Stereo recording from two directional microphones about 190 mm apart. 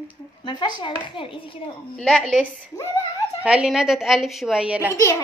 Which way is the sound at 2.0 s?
5° left (ahead or behind).